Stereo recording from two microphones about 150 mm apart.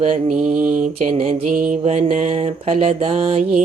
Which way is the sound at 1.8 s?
50° right (ahead or behind).